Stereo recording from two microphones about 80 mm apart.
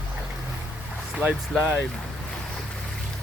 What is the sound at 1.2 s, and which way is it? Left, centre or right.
Speech, centre.